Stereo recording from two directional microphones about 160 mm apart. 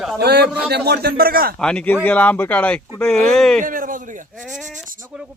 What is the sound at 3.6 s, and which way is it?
Speech, 60° right (ahead or behind).